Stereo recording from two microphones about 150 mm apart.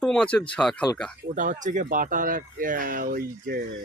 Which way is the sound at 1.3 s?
60° right (ahead or behind).